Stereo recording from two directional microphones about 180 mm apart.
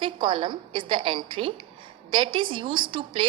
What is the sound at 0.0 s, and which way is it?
A woman's voice, 30° right (ahead or behind).